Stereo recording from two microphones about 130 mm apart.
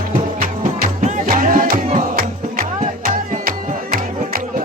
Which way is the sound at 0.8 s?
90° right.